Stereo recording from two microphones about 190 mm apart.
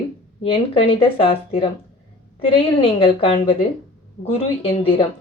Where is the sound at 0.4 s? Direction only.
30° left (ahead or behind).